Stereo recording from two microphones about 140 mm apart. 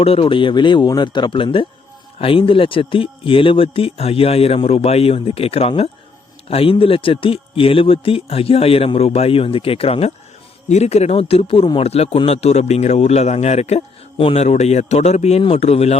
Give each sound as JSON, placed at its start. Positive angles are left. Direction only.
{"t": 0.0, "sound": "a man's voice", "side_deg": 45}